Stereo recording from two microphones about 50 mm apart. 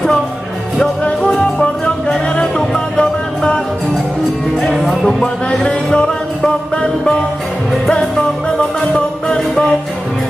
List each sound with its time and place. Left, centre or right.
1.6 s music: left
4.6 s music: centre
5.6 s music: centre